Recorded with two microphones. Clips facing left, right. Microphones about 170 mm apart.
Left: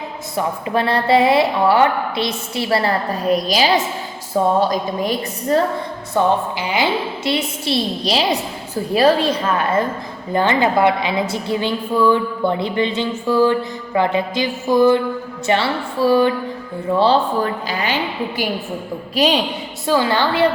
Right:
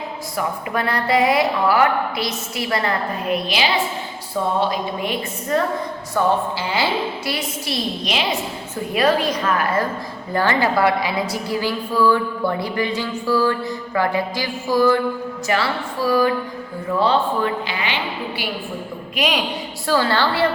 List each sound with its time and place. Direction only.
0.3 s a woman's voice: 30° left (ahead or behind)
6.1 s a woman's voice: 15° left (ahead or behind)
7.3 s a woman's voice: 25° left (ahead or behind); by 18.4 s 45° left (ahead or behind)
19.1 s a woman's voice: 30° left (ahead or behind)
19.9 s a woman's voice: 15° left (ahead or behind)